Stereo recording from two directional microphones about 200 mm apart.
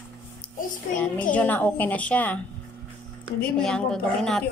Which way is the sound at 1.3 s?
10° left (ahead or behind).